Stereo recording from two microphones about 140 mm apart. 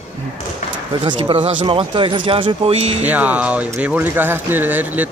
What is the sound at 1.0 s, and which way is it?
Speech, 40° right (ahead or behind).